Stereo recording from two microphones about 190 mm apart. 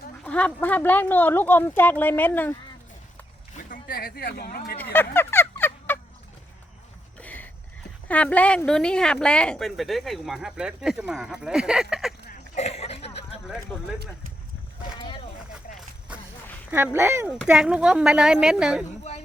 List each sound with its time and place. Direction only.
0.3 s speech: 5° left (ahead or behind)
3.6 s speech: 45° left (ahead or behind)
4.8 s fowl: 10° left (ahead or behind)
7.2 s a sound: 10° left (ahead or behind)
8.0 s speech: 5° left (ahead or behind)
12.3 s a sound: 35° left (ahead or behind)
16.7 s speech: 10° right (ahead or behind)